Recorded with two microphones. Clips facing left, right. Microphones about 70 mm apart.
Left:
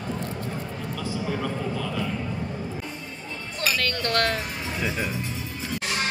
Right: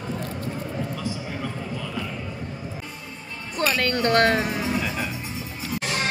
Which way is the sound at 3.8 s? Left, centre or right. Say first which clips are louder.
Right 6 dB; right.